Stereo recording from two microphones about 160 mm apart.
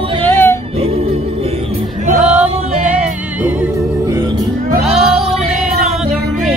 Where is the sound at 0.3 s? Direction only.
15° left (ahead or behind).